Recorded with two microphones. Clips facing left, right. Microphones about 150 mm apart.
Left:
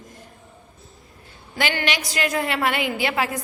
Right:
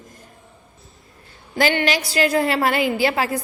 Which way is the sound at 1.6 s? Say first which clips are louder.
Right 5 dB; 35° right (ahead or behind).